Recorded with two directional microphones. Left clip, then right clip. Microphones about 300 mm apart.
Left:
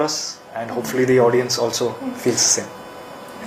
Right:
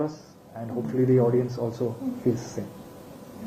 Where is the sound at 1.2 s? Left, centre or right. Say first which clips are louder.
Left 8 dB; centre.